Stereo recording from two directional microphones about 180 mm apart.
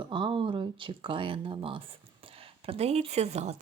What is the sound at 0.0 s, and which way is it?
Speech, 25° right (ahead or behind).